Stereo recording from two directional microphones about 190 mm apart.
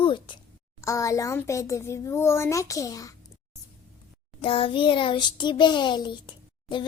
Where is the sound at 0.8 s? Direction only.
15° left (ahead or behind).